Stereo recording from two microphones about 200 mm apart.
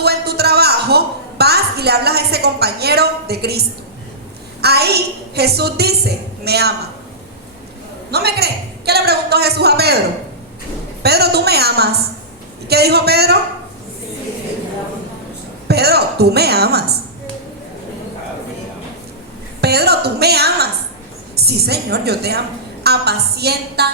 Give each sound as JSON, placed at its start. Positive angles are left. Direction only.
{"t": 0.0, "sound": "a sound", "side_deg": -55}
{"t": 4.6, "sound": "a woman's voice", "side_deg": -55}
{"t": 8.1, "sound": "a woman's voice", "side_deg": -55}
{"t": 11.0, "sound": "a woman's voice", "side_deg": -55}
{"t": 15.6, "sound": "a woman's voice", "side_deg": -55}
{"t": 19.6, "sound": "a woman's voice", "side_deg": -55}